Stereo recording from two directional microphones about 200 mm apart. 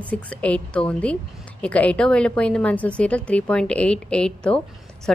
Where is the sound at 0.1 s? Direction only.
5° left (ahead or behind).